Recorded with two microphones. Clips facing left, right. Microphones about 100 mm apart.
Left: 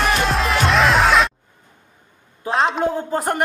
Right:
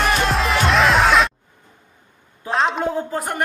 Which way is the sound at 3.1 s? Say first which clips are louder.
Left 4 dB; 40° left (ahead or behind).